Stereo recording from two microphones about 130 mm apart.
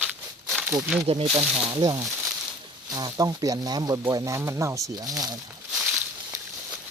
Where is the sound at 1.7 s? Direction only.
35° right (ahead or behind).